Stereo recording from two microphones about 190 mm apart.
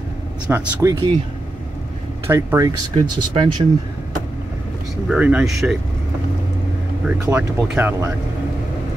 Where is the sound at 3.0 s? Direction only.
25° right (ahead or behind).